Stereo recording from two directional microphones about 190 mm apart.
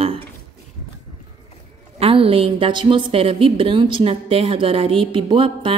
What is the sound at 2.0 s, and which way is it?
A woman's voice, 30° right (ahead or behind).